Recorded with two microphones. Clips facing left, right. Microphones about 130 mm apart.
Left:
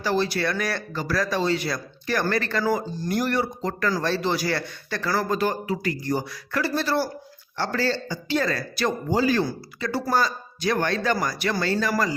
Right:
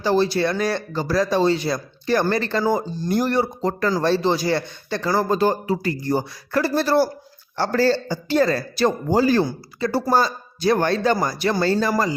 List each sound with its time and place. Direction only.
0.0 s speech: 25° right (ahead or behind)
9.4 s speech: 30° right (ahead or behind)